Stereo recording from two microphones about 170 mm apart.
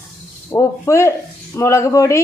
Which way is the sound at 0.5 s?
15° left (ahead or behind).